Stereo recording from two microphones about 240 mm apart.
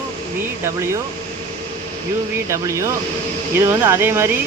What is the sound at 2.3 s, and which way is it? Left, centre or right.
Speech, centre.